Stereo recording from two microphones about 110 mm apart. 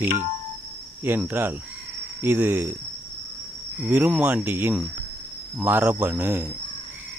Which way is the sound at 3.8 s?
15° right (ahead or behind).